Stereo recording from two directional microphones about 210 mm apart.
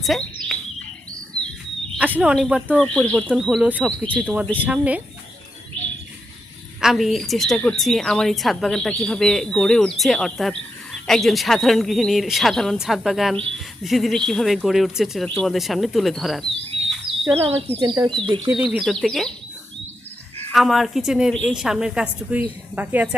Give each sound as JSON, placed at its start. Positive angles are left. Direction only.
{"t": 0.0, "sound": "speech", "side_deg": 0}
{"t": 2.0, "sound": "speech", "side_deg": -5}
{"t": 4.6, "sound": "speech", "side_deg": -5}
{"t": 6.8, "sound": "speech", "side_deg": 0}
{"t": 17.7, "sound": "speech", "side_deg": -20}
{"t": 18.4, "sound": "speech", "side_deg": -5}
{"t": 20.5, "sound": "speech", "side_deg": 0}